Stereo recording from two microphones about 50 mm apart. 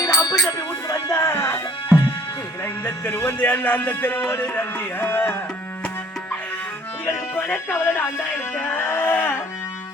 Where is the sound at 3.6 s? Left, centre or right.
Left.